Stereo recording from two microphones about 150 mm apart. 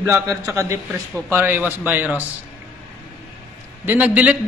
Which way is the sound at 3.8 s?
10° right (ahead or behind).